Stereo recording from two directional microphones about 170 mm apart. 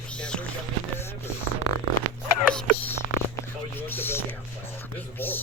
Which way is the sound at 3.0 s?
55° left (ahead or behind).